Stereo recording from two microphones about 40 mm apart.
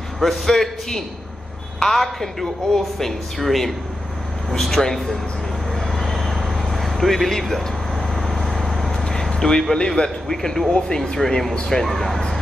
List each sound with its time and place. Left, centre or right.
0.2 s speech: centre
5.8 s a sound: centre
9.3 s speech: centre
11.8 s speech: centre